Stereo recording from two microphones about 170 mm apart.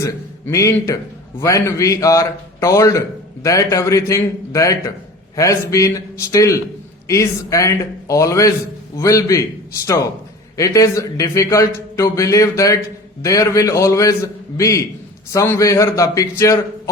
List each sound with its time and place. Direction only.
0.0 s a man's voice: 15° left (ahead or behind)